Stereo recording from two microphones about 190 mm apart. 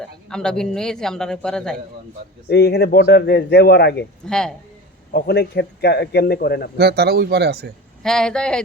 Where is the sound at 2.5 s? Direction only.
60° left (ahead or behind).